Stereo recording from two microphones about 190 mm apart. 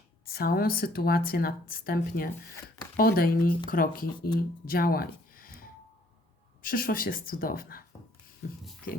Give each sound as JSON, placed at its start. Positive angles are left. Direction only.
{"t": 0.3, "sound": "speech", "side_deg": 50}